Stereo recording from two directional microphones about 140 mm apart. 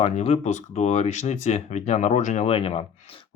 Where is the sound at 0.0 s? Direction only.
50° left (ahead or behind).